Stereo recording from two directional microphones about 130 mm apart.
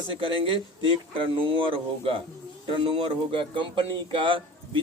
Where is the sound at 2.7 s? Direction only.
40° right (ahead or behind).